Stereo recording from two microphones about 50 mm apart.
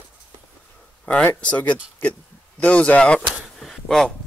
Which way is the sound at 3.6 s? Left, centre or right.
Centre.